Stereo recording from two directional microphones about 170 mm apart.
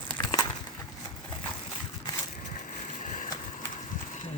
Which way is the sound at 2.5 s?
50° left (ahead or behind).